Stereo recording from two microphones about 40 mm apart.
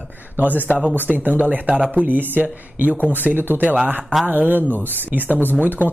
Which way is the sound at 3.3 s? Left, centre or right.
Right.